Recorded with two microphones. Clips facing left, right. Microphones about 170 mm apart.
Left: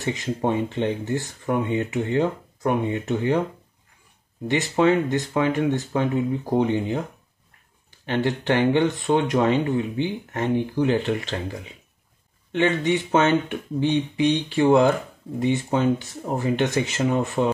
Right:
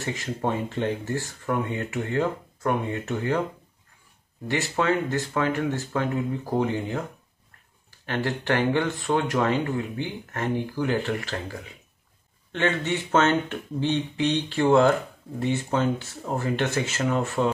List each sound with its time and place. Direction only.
0.0 s speech: 20° left (ahead or behind)
4.5 s speech: 20° left (ahead or behind)
8.0 s speech: 20° left (ahead or behind)